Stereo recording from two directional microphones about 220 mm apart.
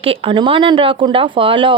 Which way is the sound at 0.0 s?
25° right (ahead or behind).